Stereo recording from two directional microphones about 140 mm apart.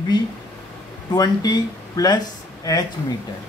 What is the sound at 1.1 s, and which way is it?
A man's voice, 25° left (ahead or behind).